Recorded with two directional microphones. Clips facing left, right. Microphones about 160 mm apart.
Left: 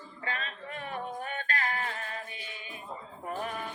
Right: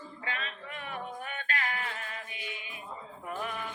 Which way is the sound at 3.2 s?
35° left (ahead or behind).